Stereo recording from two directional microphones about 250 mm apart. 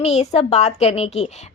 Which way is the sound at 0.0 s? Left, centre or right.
Left.